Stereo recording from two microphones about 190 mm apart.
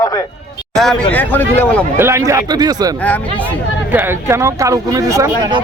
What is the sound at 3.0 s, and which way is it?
Speech, 10° left (ahead or behind).